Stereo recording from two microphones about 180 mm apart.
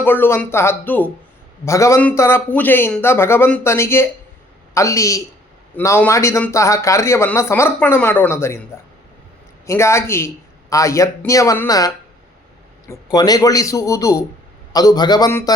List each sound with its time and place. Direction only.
0.0 s speech: 10° left (ahead or behind)
9.6 s a man's voice: 15° left (ahead or behind)